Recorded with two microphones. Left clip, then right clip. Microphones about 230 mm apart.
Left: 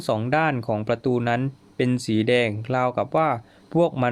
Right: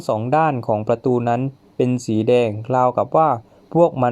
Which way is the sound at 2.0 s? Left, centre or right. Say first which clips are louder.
Right 4 dB; centre.